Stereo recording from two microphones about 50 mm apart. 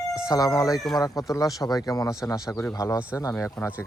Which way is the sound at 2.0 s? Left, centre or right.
Left.